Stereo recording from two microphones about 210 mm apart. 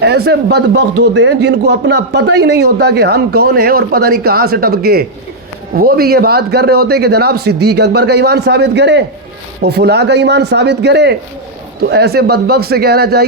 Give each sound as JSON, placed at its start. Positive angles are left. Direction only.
{"t": 0.3, "sound": "speech", "side_deg": -50}